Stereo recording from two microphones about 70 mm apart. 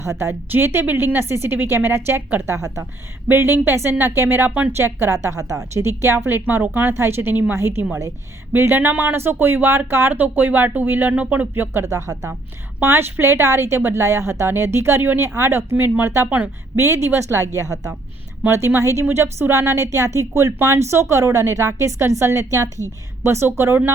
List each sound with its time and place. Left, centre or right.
0.0 s a woman's voice: right
3.2 s a woman's voice: right
4.8 s a woman's voice: right
5.4 s a woman's voice: right
8.5 s speech: right
12.8 s a woman's voice: right
17.5 s a woman's voice: right
18.5 s a woman's voice: right